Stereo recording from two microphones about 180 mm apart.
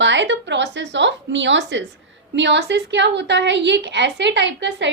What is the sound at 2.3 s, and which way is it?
A woman's voice, 75° right (ahead or behind).